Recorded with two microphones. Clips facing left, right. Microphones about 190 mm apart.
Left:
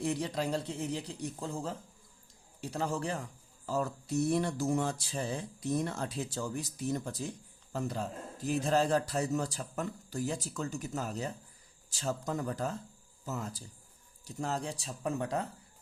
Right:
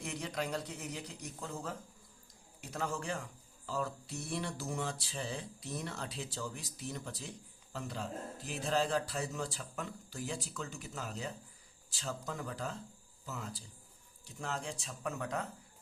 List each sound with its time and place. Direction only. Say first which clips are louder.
0.0 s speech: left 6 dB; 30° left (ahead or behind)